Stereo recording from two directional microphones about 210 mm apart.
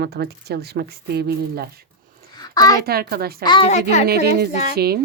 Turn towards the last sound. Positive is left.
turn(degrees=-50)  # may be behind; listen again after turning